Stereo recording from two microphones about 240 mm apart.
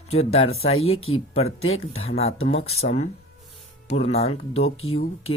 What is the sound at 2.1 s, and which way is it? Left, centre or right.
Speech, left.